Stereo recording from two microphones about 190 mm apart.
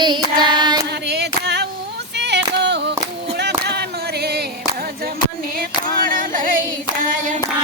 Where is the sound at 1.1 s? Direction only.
60° right (ahead or behind).